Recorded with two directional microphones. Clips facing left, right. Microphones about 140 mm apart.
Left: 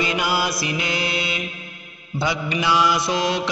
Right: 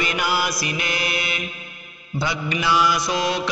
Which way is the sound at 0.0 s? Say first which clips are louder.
Left 1 dB; 20° left (ahead or behind).